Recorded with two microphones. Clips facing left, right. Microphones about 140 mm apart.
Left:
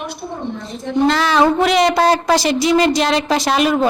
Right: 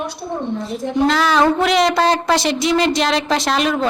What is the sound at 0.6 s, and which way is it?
A woman's voice, 5° right (ahead or behind).